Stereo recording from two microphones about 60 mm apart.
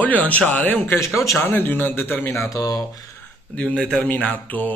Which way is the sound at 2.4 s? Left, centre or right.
Left.